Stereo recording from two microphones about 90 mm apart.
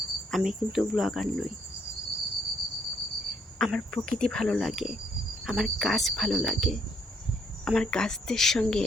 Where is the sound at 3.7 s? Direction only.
10° left (ahead or behind).